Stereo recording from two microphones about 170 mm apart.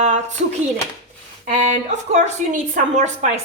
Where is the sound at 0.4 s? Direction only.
45° right (ahead or behind).